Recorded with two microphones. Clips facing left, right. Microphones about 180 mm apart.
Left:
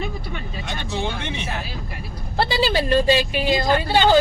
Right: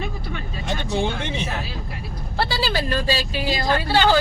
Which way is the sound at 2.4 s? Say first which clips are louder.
Left 3 dB; 20° left (ahead or behind).